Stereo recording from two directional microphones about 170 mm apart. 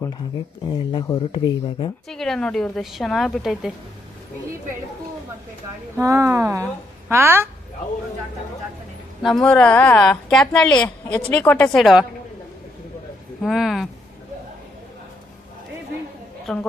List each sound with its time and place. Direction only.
0.7 s speech: 25° left (ahead or behind)
2.0 s a woman's voice: centre (ahead or behind)
6.0 s speech: 15° right (ahead or behind)
9.2 s a woman's voice: 5° left (ahead or behind)
13.4 s a woman's voice: centre (ahead or behind)
16.5 s a woman's voice: 5° left (ahead or behind)